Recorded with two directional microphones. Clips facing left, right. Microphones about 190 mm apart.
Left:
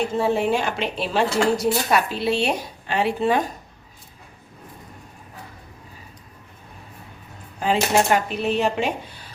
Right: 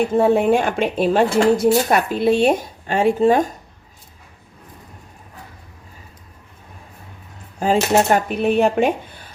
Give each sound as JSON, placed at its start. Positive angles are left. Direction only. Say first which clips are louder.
{"t": 0.1, "sound": "speech", "louder": "right 6 dB", "side_deg": -55}
{"t": 7.6, "sound": "speech", "louder": "right 4 dB", "side_deg": -45}